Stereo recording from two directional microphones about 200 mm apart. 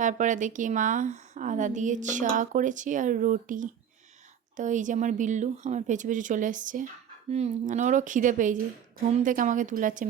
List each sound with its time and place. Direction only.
0.0 s a woman's voice: 40° right (ahead or behind)